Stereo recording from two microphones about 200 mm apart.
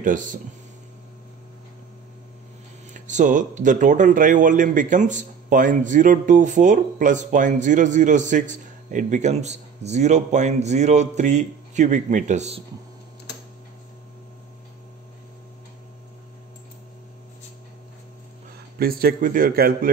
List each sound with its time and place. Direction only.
0.0 s speech: 40° right (ahead or behind)
2.9 s speech: 40° right (ahead or behind)
18.8 s a man's voice: 50° right (ahead or behind)